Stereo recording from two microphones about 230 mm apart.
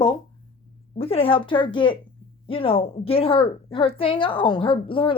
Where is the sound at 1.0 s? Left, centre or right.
Left.